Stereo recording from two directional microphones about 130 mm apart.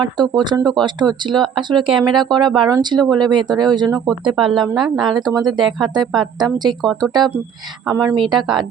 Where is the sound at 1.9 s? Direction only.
Centre (ahead or behind).